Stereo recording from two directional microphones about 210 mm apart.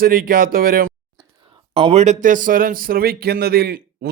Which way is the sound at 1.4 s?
25° right (ahead or behind).